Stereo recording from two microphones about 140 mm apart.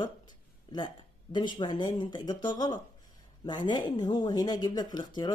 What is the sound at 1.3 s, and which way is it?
Speech, 30° left (ahead or behind).